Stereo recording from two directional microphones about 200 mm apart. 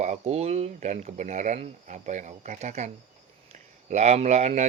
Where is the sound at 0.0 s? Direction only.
35° right (ahead or behind).